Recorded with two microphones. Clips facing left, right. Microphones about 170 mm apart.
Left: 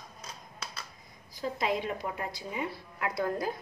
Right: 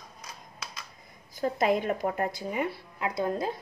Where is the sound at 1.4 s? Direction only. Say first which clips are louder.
Right 5 dB; 50° right (ahead or behind).